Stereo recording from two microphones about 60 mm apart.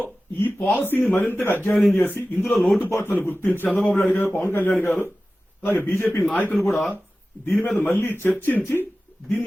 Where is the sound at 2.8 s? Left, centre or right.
Left.